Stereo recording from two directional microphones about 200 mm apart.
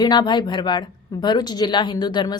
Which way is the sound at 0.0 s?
20° left (ahead or behind).